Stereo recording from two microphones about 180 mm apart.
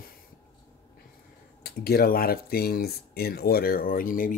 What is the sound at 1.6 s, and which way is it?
Speech, 60° left (ahead or behind).